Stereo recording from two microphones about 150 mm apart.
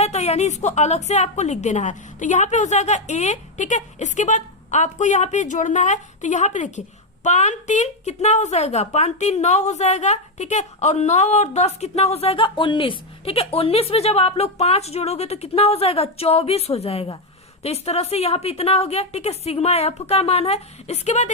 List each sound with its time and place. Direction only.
0.0 s a woman's voice: 45° left (ahead or behind)